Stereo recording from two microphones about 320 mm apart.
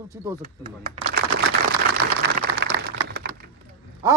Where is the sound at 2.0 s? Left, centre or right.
Right.